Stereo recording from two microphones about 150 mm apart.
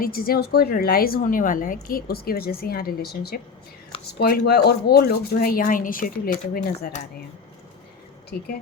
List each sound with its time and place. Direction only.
0.0 s a woman's voice: 80° left; by 7.0 s 65° left (ahead or behind)